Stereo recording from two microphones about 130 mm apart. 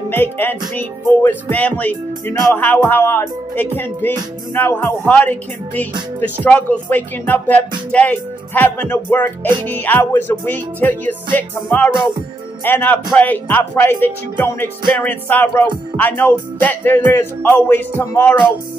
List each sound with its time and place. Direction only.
0.1 s music: 15° left (ahead or behind)